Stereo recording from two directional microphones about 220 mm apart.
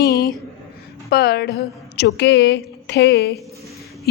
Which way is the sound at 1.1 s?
45° left (ahead or behind).